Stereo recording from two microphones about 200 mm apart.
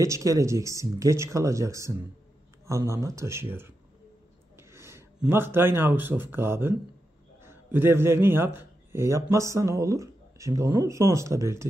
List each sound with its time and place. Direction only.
0.0 s a man's voice: 15° right (ahead or behind)